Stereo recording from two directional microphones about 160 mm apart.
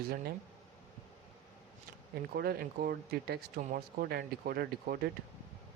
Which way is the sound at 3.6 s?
65° right (ahead or behind).